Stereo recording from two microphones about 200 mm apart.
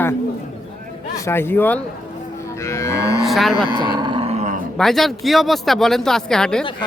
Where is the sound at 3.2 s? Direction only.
Centre (ahead or behind).